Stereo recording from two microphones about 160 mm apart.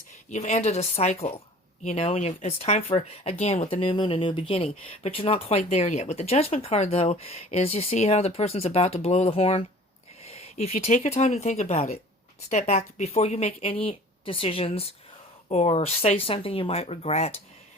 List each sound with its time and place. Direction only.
0.3 s speech: 45° left (ahead or behind)